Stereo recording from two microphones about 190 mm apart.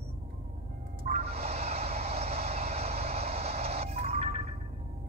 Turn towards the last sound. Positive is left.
turn(degrees=-35)  # may be behind; listen again after turning